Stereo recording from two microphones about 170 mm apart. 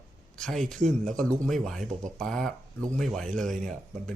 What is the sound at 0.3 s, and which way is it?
Speech, centre (ahead or behind).